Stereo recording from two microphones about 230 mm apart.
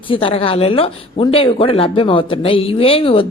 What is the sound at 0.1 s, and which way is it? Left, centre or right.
Speech, left.